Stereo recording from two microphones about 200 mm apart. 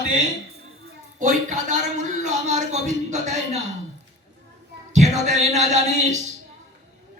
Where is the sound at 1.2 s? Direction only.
40° right (ahead or behind).